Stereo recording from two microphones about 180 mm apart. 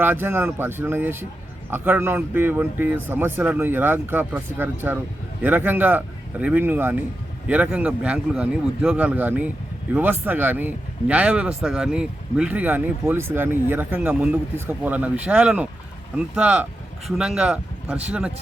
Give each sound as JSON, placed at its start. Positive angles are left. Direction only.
{"t": 0.0, "sound": "speech", "side_deg": -10}